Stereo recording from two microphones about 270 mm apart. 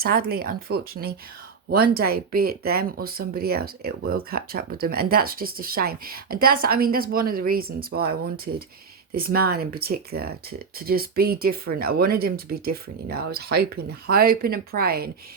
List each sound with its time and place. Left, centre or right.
0.0 s speech: right
1.7 s speech: right
2.0 s speech: right